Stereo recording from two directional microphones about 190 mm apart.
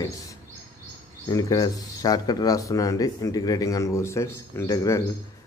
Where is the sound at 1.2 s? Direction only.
20° left (ahead or behind).